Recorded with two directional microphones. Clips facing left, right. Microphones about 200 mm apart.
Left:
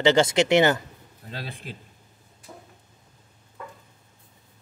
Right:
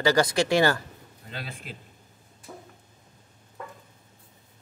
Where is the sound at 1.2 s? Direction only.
30° left (ahead or behind).